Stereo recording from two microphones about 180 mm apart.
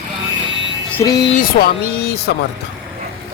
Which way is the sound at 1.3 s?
60° left (ahead or behind).